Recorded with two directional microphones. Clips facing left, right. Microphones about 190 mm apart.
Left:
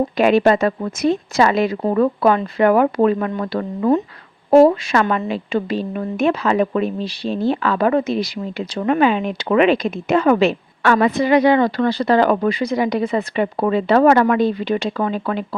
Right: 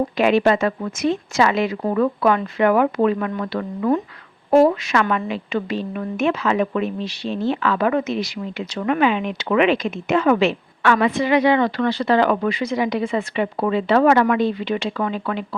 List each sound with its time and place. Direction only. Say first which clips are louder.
0.2 s a woman's voice: left 3 dB; 40° left (ahead or behind)